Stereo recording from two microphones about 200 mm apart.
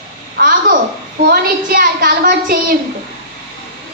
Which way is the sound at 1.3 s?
45° right (ahead or behind).